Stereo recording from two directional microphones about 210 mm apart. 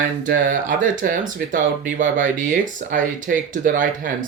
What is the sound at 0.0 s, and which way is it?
Speech, 40° right (ahead or behind).